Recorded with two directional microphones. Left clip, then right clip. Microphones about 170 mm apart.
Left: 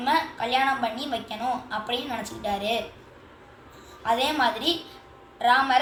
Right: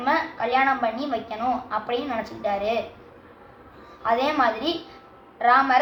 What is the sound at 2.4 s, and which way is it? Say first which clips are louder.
Speech: right 2 dB; 25° right (ahead or behind).